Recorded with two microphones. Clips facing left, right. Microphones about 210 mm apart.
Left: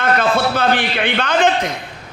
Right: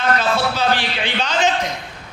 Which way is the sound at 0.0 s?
55° left (ahead or behind).